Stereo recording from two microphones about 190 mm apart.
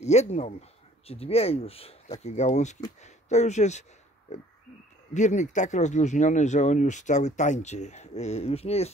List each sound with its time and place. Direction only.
0.0 s speech: 35° left (ahead or behind)